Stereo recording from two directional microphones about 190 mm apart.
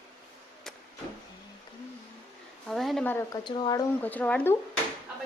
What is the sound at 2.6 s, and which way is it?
Speech, centre (ahead or behind).